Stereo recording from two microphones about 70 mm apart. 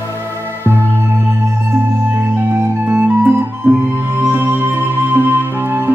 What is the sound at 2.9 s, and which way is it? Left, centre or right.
Music, right.